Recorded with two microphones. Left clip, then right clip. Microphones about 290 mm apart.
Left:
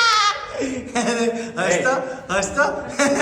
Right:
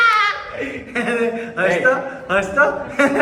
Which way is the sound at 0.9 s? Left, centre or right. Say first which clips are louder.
Right 2 dB; centre.